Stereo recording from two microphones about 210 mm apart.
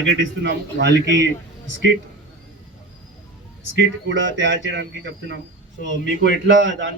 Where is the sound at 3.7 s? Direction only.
60° right (ahead or behind).